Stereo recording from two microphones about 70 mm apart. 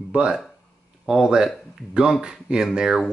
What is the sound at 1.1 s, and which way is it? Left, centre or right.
Speech, centre.